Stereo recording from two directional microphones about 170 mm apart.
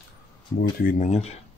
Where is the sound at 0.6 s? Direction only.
50° left (ahead or behind).